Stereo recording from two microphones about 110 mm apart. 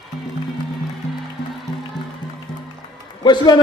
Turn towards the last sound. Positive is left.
turn(degrees=40)  # may be behind; listen again after turning